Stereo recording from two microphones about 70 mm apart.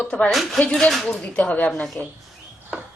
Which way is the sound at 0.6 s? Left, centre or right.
Centre.